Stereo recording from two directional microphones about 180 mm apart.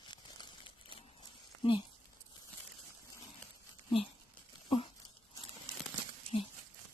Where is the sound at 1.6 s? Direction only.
30° left (ahead or behind).